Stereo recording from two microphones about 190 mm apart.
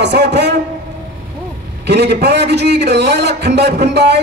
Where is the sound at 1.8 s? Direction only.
60° right (ahead or behind).